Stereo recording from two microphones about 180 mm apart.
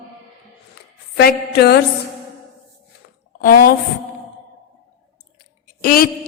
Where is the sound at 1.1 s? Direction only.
65° left (ahead or behind).